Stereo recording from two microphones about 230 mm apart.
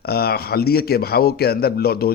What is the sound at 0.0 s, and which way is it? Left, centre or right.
A man's voice, left.